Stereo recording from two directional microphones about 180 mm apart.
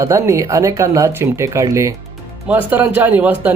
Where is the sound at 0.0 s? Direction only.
15° right (ahead or behind).